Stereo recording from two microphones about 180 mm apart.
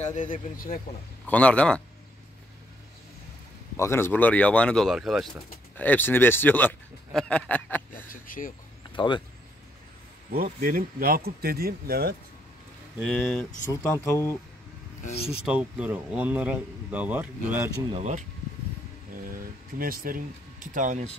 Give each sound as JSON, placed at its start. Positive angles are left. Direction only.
{"t": 0.0, "sound": "speech", "side_deg": 45}
{"t": 1.2, "sound": "speech", "side_deg": 5}
{"t": 3.7, "sound": "speech", "side_deg": 15}
{"t": 8.1, "sound": "speech", "side_deg": 50}
{"t": 8.9, "sound": "speech", "side_deg": 25}
{"t": 10.3, "sound": "speech", "side_deg": -55}
{"t": 13.0, "sound": "speech", "side_deg": 5}
{"t": 13.7, "sound": "speech", "side_deg": 15}
{"t": 15.4, "sound": "speech", "side_deg": -5}
{"t": 17.9, "sound": "speech", "side_deg": -40}
{"t": 19.8, "sound": "speech", "side_deg": -55}